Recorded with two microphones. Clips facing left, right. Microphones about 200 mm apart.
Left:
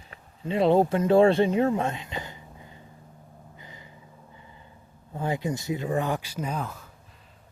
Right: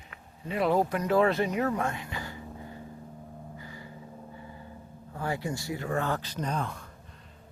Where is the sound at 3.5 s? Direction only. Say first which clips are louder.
Right 4 dB; 20° left (ahead or behind).